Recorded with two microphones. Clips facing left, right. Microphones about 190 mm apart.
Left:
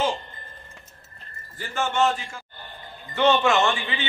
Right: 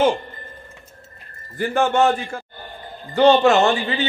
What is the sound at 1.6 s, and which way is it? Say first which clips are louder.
Speech: right 6 dB; 60° right (ahead or behind).